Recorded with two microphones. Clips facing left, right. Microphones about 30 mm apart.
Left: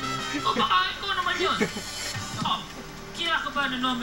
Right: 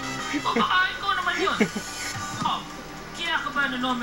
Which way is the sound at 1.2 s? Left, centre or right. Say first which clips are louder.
Left 1 dB; centre.